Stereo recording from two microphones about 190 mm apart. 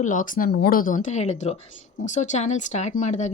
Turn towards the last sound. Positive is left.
turn(degrees=40)  # may be behind; listen again after turning